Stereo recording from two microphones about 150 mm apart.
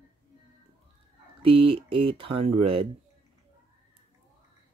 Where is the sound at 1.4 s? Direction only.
35° right (ahead or behind).